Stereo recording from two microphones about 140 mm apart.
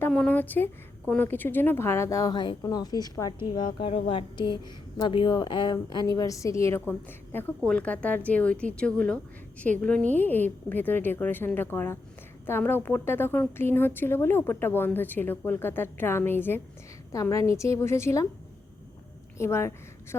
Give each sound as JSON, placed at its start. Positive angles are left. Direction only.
{"t": 0.1, "sound": "a woman's voice", "side_deg": 5}
{"t": 19.4, "sound": "a woman's voice", "side_deg": 20}